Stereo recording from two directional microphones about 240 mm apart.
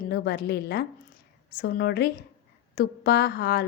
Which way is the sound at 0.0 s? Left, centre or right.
Left.